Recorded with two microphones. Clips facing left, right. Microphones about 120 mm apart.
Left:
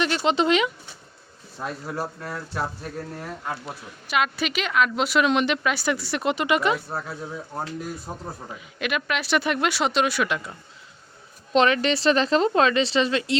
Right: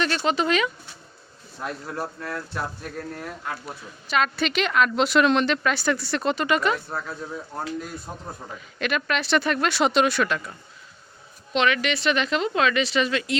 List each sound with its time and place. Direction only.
0.0 s speech: 20° left (ahead or behind)
1.5 s speech: 10° left (ahead or behind)
8.8 s speech: 10° left (ahead or behind)
9.7 s speech: centre (ahead or behind)
10.2 s speech: 15° left (ahead or behind)
11.5 s a woman's voice: 35° left (ahead or behind)